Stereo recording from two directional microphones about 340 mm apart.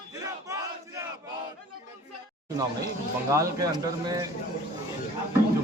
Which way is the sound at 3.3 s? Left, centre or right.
Centre.